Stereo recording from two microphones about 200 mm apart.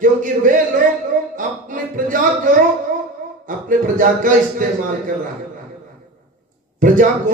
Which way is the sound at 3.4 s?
40° right (ahead or behind).